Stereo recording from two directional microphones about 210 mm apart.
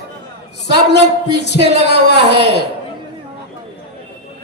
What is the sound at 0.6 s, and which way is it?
A man's voice, 55° left (ahead or behind).